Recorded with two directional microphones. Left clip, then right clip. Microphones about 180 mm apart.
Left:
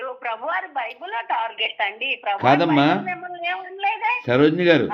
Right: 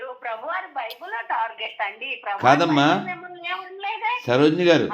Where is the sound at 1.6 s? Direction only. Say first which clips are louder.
Left 5 dB; 55° left (ahead or behind).